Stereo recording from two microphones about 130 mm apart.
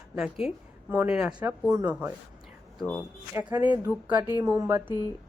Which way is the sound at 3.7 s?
15° right (ahead or behind).